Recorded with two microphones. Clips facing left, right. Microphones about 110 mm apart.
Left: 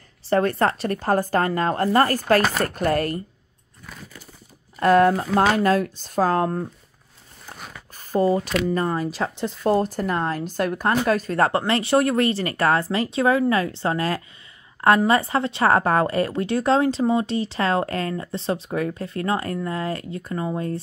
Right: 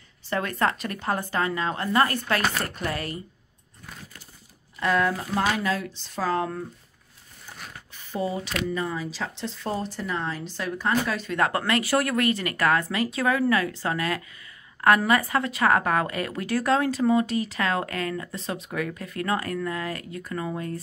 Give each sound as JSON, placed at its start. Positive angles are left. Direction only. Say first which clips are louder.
{"t": 0.3, "sound": "speech", "louder": "left 6 dB", "side_deg": 35}
{"t": 4.7, "sound": "a woman's voice", "louder": "left 8 dB", "side_deg": 50}